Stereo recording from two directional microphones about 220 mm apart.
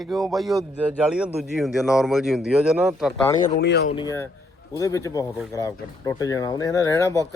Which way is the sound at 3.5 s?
50° left (ahead or behind).